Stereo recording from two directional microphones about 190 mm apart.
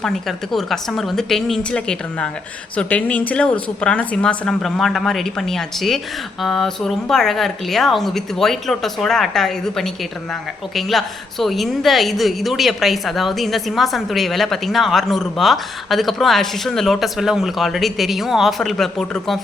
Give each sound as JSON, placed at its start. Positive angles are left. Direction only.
{"t": 0.0, "sound": "a woman's voice", "side_deg": 0}